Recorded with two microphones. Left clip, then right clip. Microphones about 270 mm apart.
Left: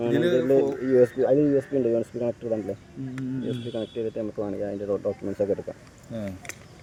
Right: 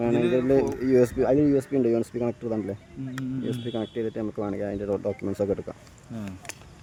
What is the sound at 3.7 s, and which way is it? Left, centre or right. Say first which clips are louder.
Speech: left 1 dB; right.